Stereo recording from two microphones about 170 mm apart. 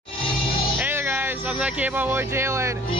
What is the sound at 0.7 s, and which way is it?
Speech, 10° right (ahead or behind).